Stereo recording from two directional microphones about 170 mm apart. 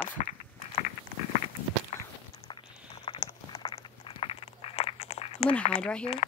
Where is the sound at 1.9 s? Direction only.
40° left (ahead or behind).